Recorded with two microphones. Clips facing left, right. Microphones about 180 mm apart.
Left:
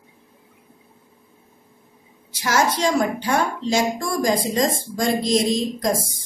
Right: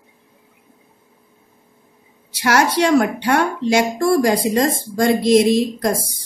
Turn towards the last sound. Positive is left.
turn(degrees=-65)  # may be behind; listen again after turning